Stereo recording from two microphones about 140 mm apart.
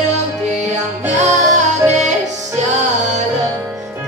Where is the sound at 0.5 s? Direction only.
55° right (ahead or behind).